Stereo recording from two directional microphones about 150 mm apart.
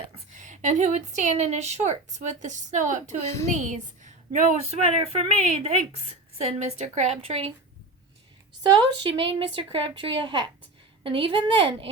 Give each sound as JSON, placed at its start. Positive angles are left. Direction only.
{"t": 0.3, "sound": "a woman's voice", "side_deg": -55}
{"t": 4.8, "sound": "a woman's voice", "side_deg": -40}
{"t": 9.0, "sound": "a woman's voice", "side_deg": -35}